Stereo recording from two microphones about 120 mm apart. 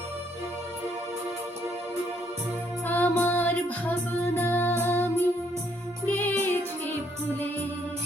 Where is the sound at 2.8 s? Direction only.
15° left (ahead or behind).